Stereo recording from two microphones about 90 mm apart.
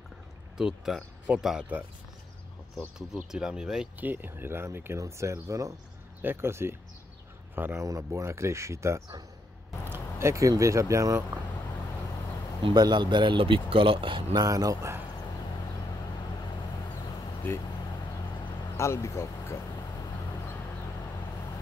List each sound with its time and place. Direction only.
0.6 s speech: 5° right (ahead or behind)
3.0 s speech: 5° right (ahead or behind)
4.0 s speech: 20° right (ahead or behind)
12.6 s speech: 55° right (ahead or behind); by 14.4 s 70° right (ahead or behind)
14.4 s speech: 40° right (ahead or behind)
17.4 s speech: 25° left (ahead or behind)
18.8 s speech: 35° left (ahead or behind)